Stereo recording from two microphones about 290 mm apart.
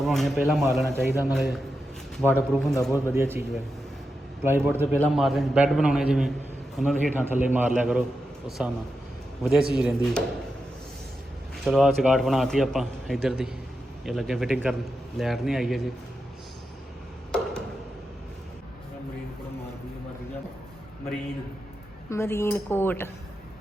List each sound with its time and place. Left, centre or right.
0.0 s a man's voice: centre
11.6 s a man's voice: centre
22.1 s speech: centre